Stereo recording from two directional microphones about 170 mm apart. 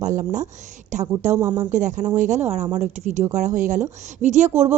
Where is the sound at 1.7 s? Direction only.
45° right (ahead or behind).